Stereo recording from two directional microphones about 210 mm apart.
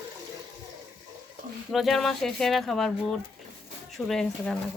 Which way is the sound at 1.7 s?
Centre (ahead or behind).